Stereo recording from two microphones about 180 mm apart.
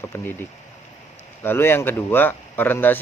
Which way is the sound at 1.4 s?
10° left (ahead or behind).